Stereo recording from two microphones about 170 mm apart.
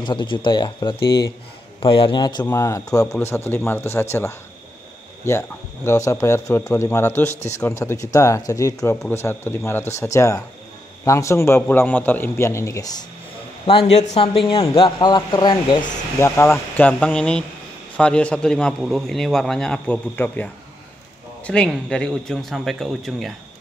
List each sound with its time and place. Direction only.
0.0 s a man's voice: 30° left (ahead or behind)
5.9 s a man's voice: 15° left (ahead or behind)
13.7 s a man's voice: 35° left (ahead or behind); by 20.4 s 10° left (ahead or behind)
21.5 s a man's voice: 5° left (ahead or behind)